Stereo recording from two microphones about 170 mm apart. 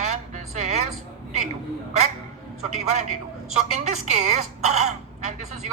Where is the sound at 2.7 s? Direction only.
45° right (ahead or behind).